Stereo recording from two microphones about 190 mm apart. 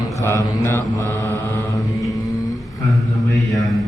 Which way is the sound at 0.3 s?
15° left (ahead or behind).